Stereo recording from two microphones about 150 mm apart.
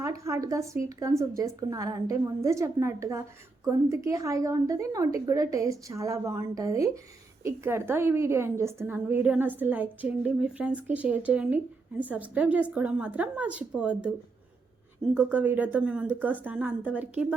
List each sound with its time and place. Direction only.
0.0 s a woman's voice: 20° right (ahead or behind)